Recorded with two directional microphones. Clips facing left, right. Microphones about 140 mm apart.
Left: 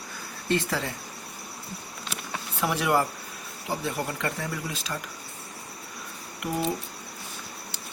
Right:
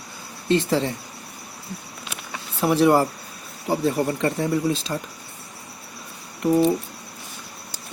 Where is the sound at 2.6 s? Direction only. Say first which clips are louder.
Right 8 dB; 35° right (ahead or behind).